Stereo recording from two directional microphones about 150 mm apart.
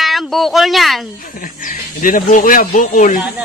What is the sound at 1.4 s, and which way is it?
Speech, 65° left (ahead or behind).